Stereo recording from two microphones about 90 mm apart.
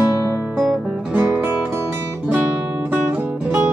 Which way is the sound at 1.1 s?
25° right (ahead or behind).